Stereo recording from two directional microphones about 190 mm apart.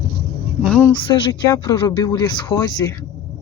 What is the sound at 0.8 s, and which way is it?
Speech, 20° left (ahead or behind).